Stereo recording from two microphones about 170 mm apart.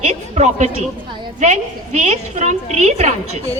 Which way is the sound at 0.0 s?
45° right (ahead or behind).